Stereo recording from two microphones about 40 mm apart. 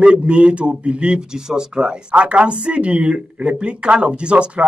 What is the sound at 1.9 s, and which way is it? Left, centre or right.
Speech, right.